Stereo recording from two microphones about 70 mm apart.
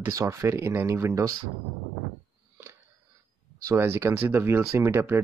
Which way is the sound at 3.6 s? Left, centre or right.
Right.